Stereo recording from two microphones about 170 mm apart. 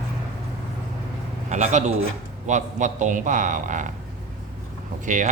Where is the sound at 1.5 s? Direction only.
45° right (ahead or behind).